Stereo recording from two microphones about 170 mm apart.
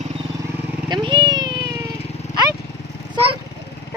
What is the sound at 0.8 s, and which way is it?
Cat, 25° right (ahead or behind).